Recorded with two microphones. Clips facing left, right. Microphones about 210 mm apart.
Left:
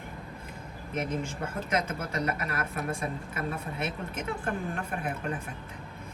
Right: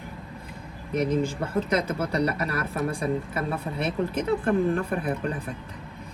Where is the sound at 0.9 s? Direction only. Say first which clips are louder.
Right 8 dB; 35° right (ahead or behind).